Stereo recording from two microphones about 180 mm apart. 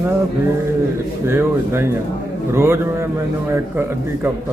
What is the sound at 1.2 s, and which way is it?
Speech, 15° right (ahead or behind).